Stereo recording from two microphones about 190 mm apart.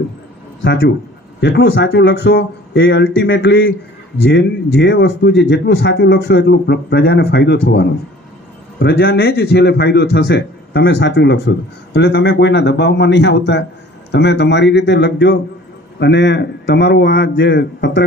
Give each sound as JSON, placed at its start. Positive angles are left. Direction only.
{"t": 1.4, "sound": "speech", "side_deg": 65}
{"t": 4.3, "sound": "a man's voice", "side_deg": 70}